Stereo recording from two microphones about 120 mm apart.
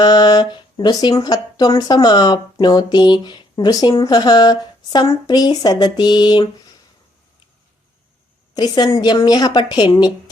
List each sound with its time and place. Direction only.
0.0 s speech: 35° left (ahead or behind)
8.5 s speech: 35° left (ahead or behind)